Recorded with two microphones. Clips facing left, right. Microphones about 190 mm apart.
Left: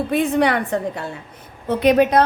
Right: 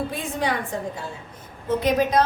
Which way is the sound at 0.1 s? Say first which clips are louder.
Left 9 dB; 65° left (ahead or behind).